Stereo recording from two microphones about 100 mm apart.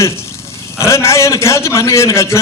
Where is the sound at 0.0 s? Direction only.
25° left (ahead or behind).